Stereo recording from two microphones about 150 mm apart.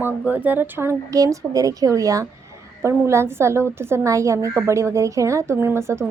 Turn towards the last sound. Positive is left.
turn(degrees=-20)  # may be behind; listen again after turning